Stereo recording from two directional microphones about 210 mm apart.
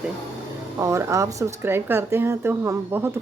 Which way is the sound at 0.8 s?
15° right (ahead or behind).